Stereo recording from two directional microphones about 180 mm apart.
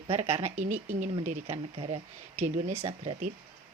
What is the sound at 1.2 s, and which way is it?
Speech, 35° right (ahead or behind).